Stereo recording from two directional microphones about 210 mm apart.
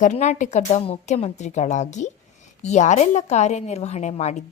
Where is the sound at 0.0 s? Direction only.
35° left (ahead or behind).